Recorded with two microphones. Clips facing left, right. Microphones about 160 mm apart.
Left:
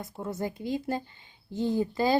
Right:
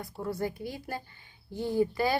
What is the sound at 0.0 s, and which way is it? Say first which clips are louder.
A woman's voice: even; 20° left (ahead or behind).